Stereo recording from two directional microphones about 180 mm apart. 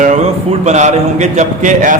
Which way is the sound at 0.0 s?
40° right (ahead or behind).